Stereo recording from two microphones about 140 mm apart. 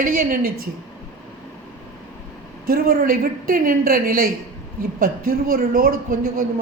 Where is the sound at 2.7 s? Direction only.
90° right.